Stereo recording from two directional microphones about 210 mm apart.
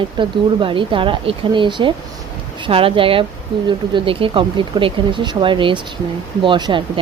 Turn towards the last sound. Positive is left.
turn(degrees=-25)  # may be behind; listen again after turning